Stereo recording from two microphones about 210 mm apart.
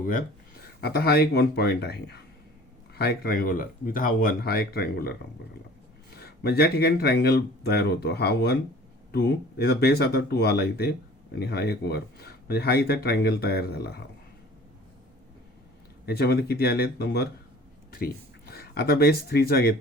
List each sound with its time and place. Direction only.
0.0 s speech: 40° left (ahead or behind)
6.1 s speech: 50° left (ahead or behind)
16.0 s speech: 50° left (ahead or behind)